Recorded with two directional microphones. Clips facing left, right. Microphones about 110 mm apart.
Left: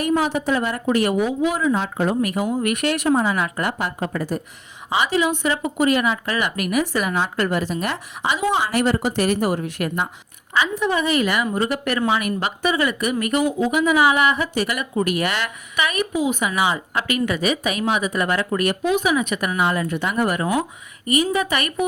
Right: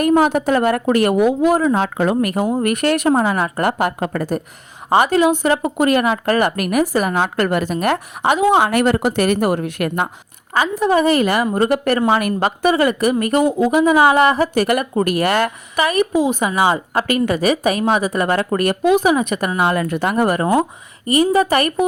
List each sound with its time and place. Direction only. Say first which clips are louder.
0.0 s speech: right 6 dB; 55° right (ahead or behind)
1.8 s speech: right 4 dB; 90° right
2.2 s speech: right 4 dB; 45° right (ahead or behind)
7.2 s a woman's voice: right 4 dB; 60° right (ahead or behind)
10.5 s a woman's voice: right 5 dB; 40° right (ahead or behind)
19.6 s a woman's voice: right 4 dB; 60° right (ahead or behind)
20.0 s a woman's voice: right 5 dB; 40° right (ahead or behind)